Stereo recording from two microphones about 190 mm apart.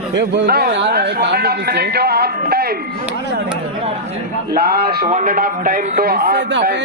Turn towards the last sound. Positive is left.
turn(degrees=-60)  # may be behind; listen again after turning